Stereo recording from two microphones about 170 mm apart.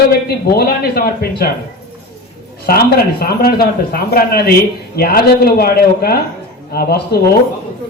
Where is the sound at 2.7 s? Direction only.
60° left (ahead or behind).